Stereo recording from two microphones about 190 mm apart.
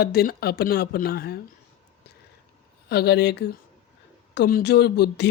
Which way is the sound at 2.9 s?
60° left (ahead or behind).